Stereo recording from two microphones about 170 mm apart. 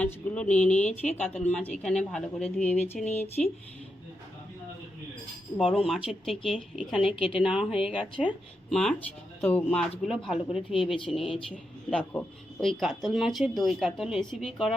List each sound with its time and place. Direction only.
0.0 s speech: 10° left (ahead or behind)
3.0 s speech: 40° left (ahead or behind)
5.7 s speech: centre (ahead or behind)
7.3 s speech: 30° left (ahead or behind)
7.5 s speech: 5° right (ahead or behind)